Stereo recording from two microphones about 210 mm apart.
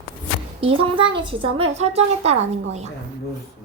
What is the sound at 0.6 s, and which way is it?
A child's voice, 25° right (ahead or behind).